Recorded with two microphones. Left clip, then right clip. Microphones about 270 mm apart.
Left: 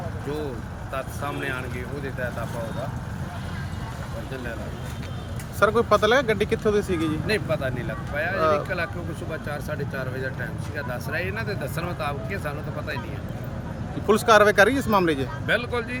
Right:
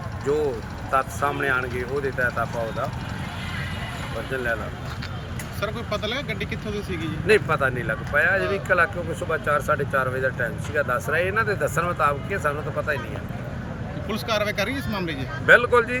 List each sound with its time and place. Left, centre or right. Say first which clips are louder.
0.9 s speech: right 8 dB; centre
5.5 s speech: left 10 dB; centre
7.3 s speech: right 10 dB; centre
14.1 s speech: left 9 dB; centre